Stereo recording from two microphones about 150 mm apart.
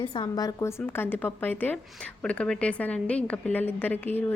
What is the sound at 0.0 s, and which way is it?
A woman's voice, 30° left (ahead or behind).